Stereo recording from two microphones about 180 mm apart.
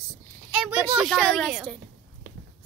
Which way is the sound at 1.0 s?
Centre (ahead or behind).